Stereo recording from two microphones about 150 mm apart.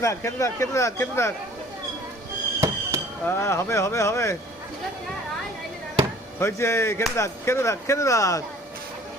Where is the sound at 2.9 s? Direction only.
20° right (ahead or behind).